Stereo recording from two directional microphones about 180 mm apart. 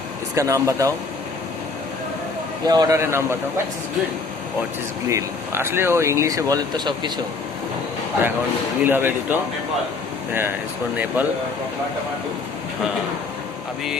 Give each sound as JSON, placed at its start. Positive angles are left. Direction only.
{"t": 0.3, "sound": "speech", "side_deg": -15}
{"t": 2.6, "sound": "speech", "side_deg": -20}
{"t": 5.0, "sound": "speech", "side_deg": -15}
{"t": 8.8, "sound": "speech", "side_deg": -10}